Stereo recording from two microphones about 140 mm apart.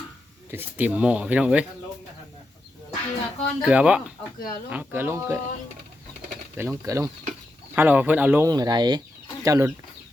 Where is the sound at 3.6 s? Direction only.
5° right (ahead or behind).